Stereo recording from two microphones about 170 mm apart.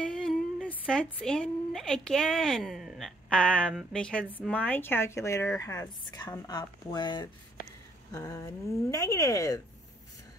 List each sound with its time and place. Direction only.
0.0 s speech: 5° left (ahead or behind); by 9.6 s 20° left (ahead or behind)